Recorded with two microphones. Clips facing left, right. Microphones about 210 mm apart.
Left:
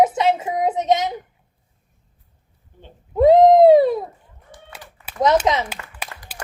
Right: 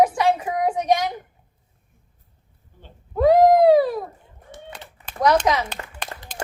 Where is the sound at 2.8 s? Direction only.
20° left (ahead or behind).